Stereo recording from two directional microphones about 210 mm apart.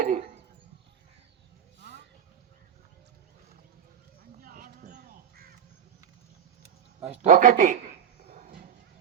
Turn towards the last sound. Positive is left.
turn(degrees=-40)  # may be behind; listen again after turning